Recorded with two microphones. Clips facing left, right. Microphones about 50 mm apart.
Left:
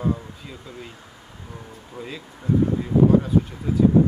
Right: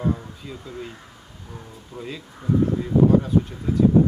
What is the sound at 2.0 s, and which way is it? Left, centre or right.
Speech, centre.